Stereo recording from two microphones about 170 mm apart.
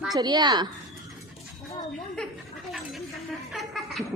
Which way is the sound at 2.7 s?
Centre (ahead or behind).